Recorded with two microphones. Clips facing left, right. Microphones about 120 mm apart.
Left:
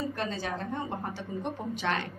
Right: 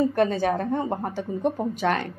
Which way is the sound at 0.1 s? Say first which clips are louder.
Right 11 dB; 55° right (ahead or behind).